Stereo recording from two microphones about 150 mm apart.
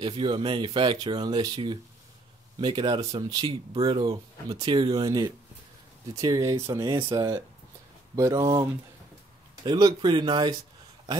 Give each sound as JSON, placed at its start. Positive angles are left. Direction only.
{"t": 0.0, "sound": "speech", "side_deg": -35}
{"t": 9.7, "sound": "speech", "side_deg": -30}